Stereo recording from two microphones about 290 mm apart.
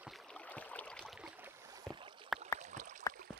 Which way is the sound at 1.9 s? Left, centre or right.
Centre.